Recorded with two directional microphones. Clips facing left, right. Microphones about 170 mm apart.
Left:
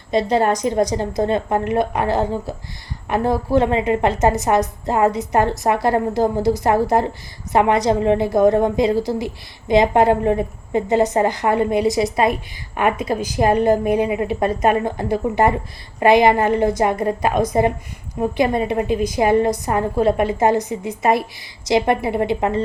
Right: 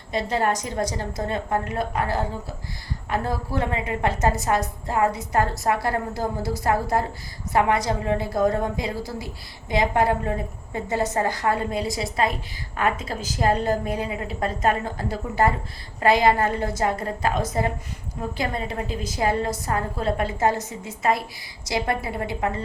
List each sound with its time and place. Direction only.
0.1 s a woman's voice: 20° left (ahead or behind)